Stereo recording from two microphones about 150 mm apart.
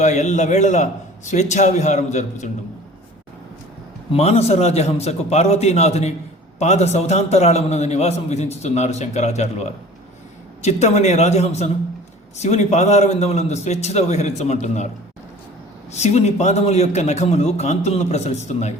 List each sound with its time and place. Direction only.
0.0 s a man's voice: 50° left (ahead or behind)
4.1 s a man's voice: 45° left (ahead or behind)
15.9 s a man's voice: 50° left (ahead or behind)